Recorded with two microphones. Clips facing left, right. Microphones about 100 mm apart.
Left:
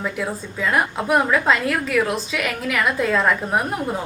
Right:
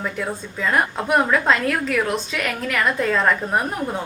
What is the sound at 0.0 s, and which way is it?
A woman's voice, centre (ahead or behind).